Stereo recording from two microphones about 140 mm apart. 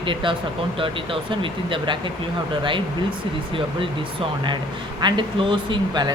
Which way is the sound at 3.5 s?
40° right (ahead or behind).